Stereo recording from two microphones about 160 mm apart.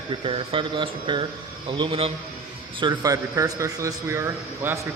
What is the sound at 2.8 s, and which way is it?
A man's voice, 25° right (ahead or behind).